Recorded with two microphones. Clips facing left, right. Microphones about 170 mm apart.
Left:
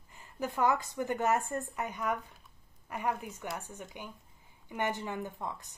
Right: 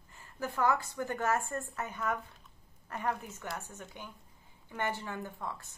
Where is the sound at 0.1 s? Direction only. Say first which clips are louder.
Left 2 dB; 15° left (ahead or behind).